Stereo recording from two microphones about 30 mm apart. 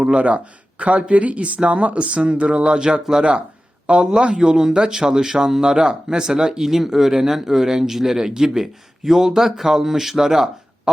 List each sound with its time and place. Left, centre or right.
0.0 s speech: right
2.6 s speech: right
3.9 s speech: right
4.3 s speech: right
8.1 s speech: right